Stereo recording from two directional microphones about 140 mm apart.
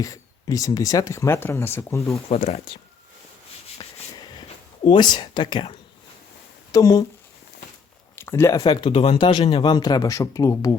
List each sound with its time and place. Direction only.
0.0 s speech: 25° left (ahead or behind)
2.3 s speech: 50° left (ahead or behind)
4.1 s a sound: 30° left (ahead or behind)
4.8 s speech: 35° left (ahead or behind)
6.7 s speech: 25° left (ahead or behind)
8.1 s a sound: 20° left (ahead or behind)
8.6 s speech: 35° left (ahead or behind)
9.4 s speech: 50° left (ahead or behind)
9.6 s speech: 30° left (ahead or behind)